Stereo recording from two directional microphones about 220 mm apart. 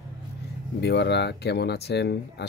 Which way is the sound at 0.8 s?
50° left (ahead or behind).